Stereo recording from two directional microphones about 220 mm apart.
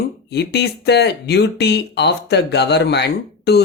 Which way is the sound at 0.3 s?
50° left (ahead or behind).